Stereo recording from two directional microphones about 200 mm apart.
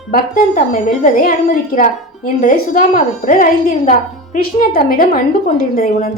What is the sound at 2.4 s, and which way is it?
A woman's voice, 40° left (ahead or behind).